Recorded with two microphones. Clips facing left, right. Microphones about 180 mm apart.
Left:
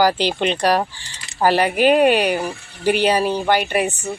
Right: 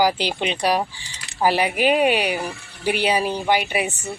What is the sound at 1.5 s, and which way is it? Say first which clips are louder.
Speech: left 5 dB; 45° left (ahead or behind).